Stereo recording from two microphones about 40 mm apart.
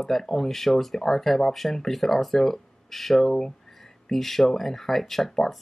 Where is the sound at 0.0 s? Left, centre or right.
Centre.